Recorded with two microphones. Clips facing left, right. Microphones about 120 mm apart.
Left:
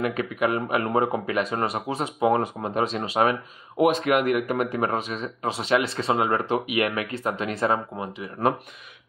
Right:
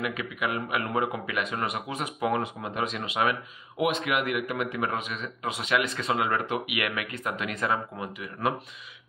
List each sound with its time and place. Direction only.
0.0 s speech: 40° left (ahead or behind)